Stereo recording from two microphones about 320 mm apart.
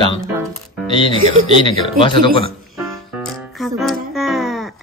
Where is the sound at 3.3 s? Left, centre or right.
Centre.